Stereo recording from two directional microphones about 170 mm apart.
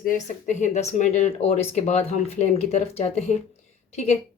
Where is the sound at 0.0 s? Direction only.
50° left (ahead or behind).